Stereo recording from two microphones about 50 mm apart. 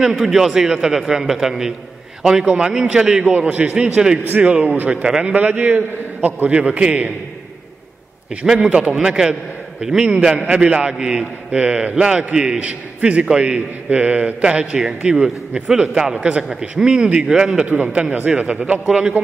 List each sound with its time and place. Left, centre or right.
0.0 s a man's voice: centre
2.4 s a man's voice: right
2.7 s a man's voice: centre
3.3 s a man's voice: right
3.8 s a man's voice: centre
5.0 s a man's voice: centre
5.3 s a man's voice: right
6.5 s a man's voice: right
8.4 s a man's voice: centre
18.1 s a man's voice: right